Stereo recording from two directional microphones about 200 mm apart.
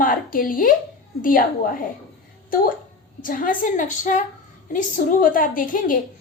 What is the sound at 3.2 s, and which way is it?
A woman's voice, 45° left (ahead or behind).